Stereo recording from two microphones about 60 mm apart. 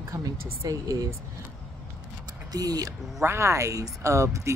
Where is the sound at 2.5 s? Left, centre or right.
Right.